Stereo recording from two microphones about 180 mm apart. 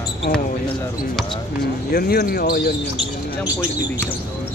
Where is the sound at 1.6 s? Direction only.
60° left (ahead or behind).